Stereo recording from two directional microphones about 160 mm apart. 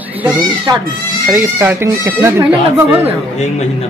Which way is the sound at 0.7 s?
25° right (ahead or behind).